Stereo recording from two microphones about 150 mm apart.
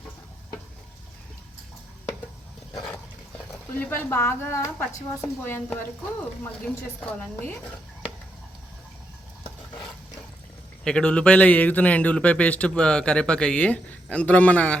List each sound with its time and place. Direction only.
3.8 s a man's voice: 15° left (ahead or behind)
7.0 s a man's voice: 10° left (ahead or behind)
10.8 s a man's voice: 5° left (ahead or behind)